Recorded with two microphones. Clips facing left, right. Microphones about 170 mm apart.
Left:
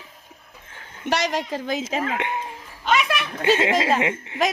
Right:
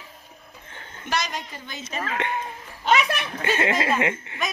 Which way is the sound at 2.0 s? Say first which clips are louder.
Left 2 dB; 15° left (ahead or behind).